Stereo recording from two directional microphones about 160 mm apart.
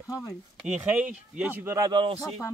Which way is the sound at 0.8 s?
5° right (ahead or behind).